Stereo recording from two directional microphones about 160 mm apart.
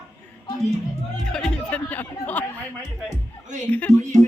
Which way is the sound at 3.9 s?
50° right (ahead or behind).